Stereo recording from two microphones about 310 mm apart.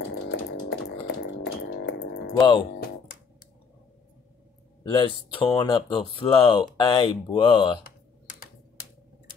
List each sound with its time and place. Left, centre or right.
0.3 s chainsaw: left
2.3 s speech: centre
4.9 s speech: centre